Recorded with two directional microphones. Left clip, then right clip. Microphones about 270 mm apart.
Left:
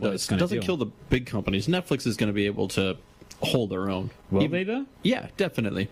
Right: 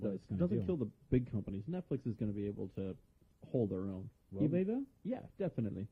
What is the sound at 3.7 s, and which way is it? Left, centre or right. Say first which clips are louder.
Speech: left 14 dB; centre.